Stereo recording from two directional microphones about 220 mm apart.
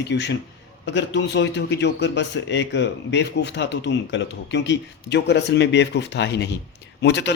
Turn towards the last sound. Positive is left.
turn(degrees=50)  # may be behind; listen again after turning